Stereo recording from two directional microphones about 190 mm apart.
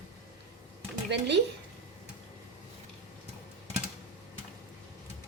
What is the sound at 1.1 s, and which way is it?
Speech, 65° right (ahead or behind).